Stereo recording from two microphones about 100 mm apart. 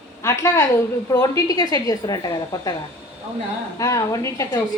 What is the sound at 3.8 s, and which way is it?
Speech, 30° left (ahead or behind).